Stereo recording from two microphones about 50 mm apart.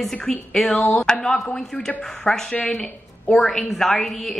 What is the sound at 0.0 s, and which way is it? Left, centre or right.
A woman's voice, centre.